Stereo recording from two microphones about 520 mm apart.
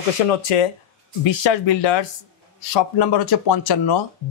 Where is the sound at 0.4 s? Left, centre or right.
Left.